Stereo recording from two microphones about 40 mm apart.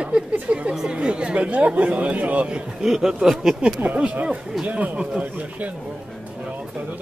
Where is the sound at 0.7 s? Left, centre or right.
Centre.